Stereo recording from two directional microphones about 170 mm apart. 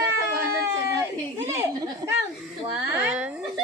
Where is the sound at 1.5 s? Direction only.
15° right (ahead or behind).